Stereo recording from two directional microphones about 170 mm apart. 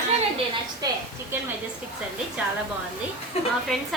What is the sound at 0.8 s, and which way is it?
Speech, 25° right (ahead or behind).